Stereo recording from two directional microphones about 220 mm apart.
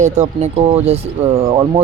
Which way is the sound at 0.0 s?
30° right (ahead or behind).